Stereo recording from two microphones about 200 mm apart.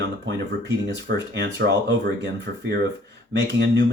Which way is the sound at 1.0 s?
60° right (ahead or behind).